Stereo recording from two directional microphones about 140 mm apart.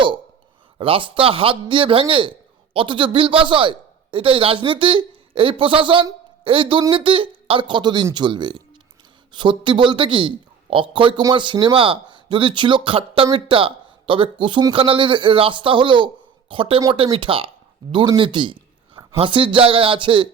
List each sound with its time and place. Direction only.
0.8 s a man's voice: 40° right (ahead or behind)